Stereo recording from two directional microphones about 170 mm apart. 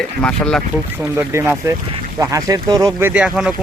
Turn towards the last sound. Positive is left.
turn(degrees=-5)  # may be behind; listen again after turning